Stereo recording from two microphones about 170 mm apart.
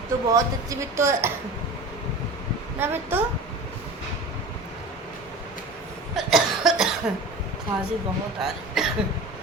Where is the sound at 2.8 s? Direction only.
10° right (ahead or behind).